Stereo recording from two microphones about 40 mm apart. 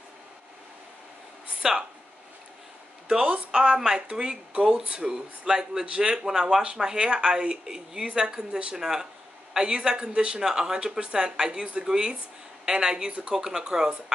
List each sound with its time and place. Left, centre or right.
1.6 s speech: centre
3.1 s speech: right